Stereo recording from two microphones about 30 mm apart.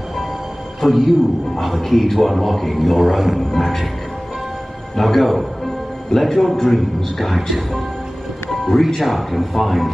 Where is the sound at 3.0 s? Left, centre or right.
Centre.